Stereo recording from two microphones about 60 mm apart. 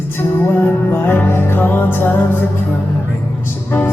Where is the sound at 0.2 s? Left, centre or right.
Left.